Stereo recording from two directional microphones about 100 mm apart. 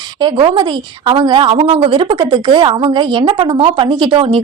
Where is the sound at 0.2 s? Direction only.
55° right (ahead or behind).